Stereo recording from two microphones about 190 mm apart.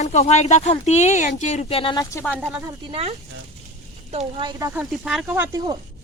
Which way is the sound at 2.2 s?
5° left (ahead or behind).